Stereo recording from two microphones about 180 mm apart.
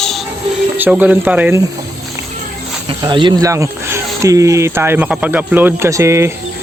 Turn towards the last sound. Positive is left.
turn(degrees=-15)  # may be behind; listen again after turning